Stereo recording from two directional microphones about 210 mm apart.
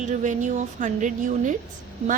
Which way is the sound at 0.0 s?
35° right (ahead or behind).